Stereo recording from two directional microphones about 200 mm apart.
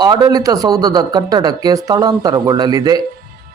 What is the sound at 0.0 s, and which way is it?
Speech, 20° right (ahead or behind).